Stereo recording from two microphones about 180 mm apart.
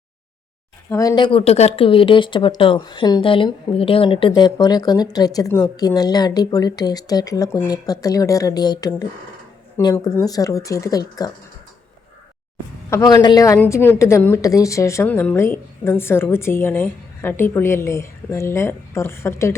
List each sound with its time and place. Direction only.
0.9 s speech: 20° left (ahead or behind)
12.9 s a woman's voice: 15° left (ahead or behind)